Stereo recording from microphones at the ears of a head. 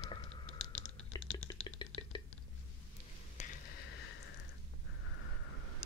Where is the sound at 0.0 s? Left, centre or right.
Left.